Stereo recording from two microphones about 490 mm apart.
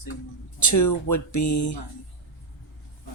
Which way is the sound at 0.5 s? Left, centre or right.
Left.